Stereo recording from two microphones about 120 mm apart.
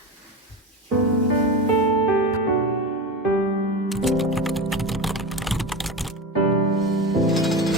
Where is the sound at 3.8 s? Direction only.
Centre (ahead or behind).